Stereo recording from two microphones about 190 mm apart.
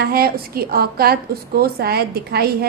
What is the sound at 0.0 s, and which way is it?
A woman's voice, 55° right (ahead or behind).